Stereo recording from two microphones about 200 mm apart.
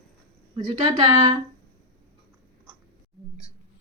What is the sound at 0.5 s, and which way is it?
Speech, 20° right (ahead or behind).